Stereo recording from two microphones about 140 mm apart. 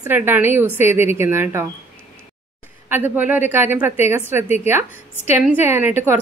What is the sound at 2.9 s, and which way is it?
A woman's voice, 15° right (ahead or behind).